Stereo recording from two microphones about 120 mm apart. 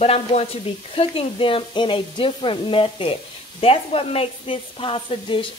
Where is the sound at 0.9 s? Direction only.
50° left (ahead or behind).